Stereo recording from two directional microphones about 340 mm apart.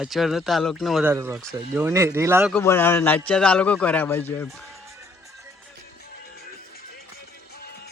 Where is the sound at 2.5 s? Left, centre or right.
Centre.